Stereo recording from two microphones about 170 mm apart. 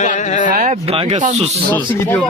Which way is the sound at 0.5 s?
45° right (ahead or behind).